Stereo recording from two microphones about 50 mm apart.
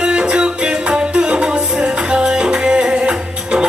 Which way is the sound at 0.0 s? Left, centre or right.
Centre.